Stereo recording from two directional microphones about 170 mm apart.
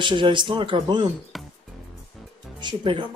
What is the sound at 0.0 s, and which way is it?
Speech, 30° right (ahead or behind).